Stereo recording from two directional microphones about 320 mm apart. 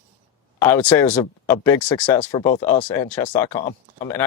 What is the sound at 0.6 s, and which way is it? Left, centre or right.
Speech, centre.